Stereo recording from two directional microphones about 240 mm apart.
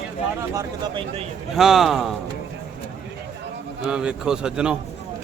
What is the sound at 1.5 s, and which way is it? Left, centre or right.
Speech, centre.